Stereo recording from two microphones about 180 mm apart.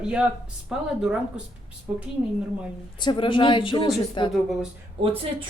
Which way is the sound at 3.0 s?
25° left (ahead or behind).